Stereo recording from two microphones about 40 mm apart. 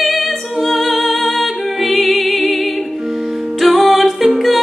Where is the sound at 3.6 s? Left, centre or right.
Centre.